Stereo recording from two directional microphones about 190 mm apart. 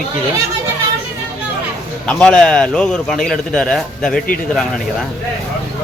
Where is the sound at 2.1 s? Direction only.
5° left (ahead or behind).